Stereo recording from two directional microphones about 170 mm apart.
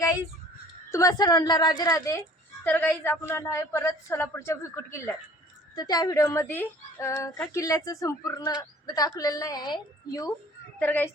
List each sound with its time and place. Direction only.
0.9 s a woman's voice: 20° left (ahead or behind)
10.8 s a woman's voice: 10° left (ahead or behind)